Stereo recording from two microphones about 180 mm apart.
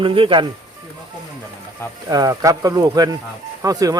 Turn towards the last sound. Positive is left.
turn(degrees=-20)  # may be behind; listen again after turning